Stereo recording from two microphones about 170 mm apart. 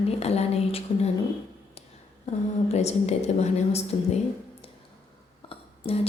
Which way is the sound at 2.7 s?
40° left (ahead or behind).